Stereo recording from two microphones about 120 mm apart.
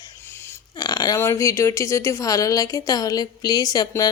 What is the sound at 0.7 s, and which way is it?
Speech, 35° left (ahead or behind).